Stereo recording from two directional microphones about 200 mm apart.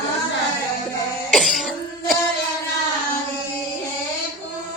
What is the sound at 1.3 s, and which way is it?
Throat clearing, centre (ahead or behind).